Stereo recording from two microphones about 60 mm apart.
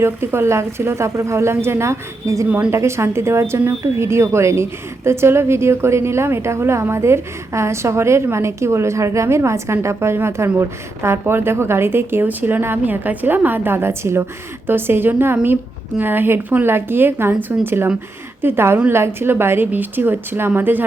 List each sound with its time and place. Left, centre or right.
0.0 s a woman's voice: right